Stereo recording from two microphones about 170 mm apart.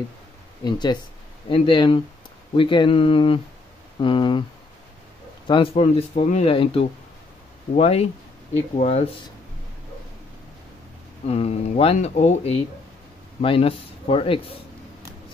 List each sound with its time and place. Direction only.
0.7 s speech: 25° left (ahead or behind)
5.5 s speech: 35° left (ahead or behind)
11.2 s speech: 40° left (ahead or behind)